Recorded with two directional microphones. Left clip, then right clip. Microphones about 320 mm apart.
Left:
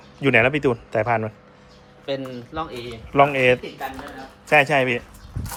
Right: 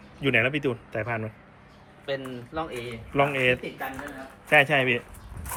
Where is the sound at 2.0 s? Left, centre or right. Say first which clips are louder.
Left 4 dB; left.